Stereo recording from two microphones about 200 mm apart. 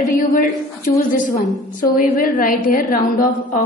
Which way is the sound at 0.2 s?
45° left (ahead or behind).